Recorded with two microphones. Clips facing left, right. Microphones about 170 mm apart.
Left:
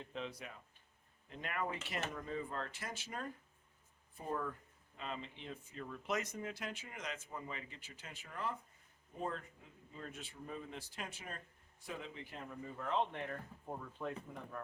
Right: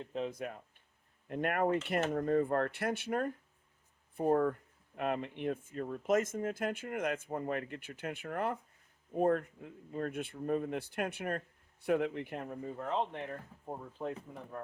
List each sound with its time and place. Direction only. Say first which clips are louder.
0.0 s speech: right 8 dB; 40° right (ahead or behind); by 12.5 s 60° right (ahead or behind)
12.6 s speech: right 2 dB; 35° right (ahead or behind)